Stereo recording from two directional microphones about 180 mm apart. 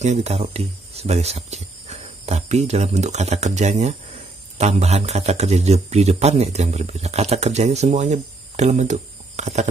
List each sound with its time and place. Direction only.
0.0 s speech: 35° right (ahead or behind)